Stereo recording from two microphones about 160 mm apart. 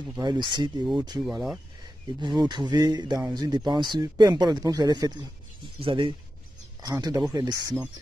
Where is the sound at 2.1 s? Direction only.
30° right (ahead or behind).